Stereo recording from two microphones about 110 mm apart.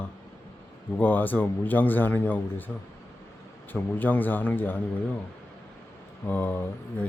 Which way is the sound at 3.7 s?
15° left (ahead or behind).